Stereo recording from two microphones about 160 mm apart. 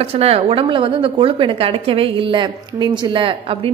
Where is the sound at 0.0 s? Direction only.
40° right (ahead or behind).